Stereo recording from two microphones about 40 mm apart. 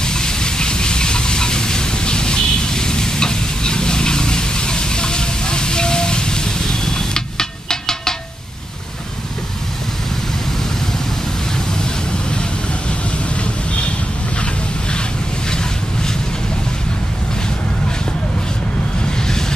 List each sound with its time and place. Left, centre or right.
0.0 s steam: centre